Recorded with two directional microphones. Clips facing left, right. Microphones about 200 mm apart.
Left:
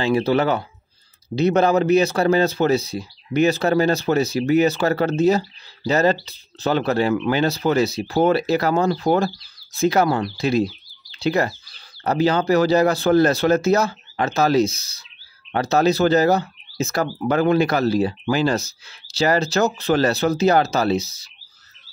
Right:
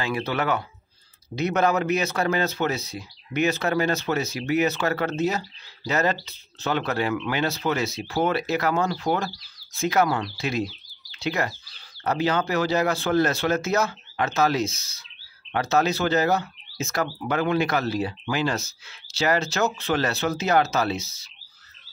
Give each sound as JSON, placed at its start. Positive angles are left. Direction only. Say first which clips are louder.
{"t": 0.0, "sound": "speech", "louder": "left 8 dB", "side_deg": 30}